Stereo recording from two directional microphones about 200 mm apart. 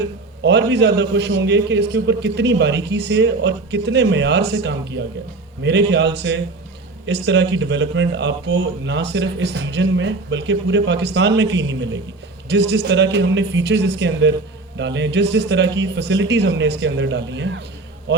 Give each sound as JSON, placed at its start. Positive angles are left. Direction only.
{"t": 0.4, "sound": "speech", "side_deg": -60}